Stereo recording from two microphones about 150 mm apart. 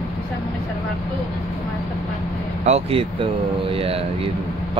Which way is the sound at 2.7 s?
40° right (ahead or behind).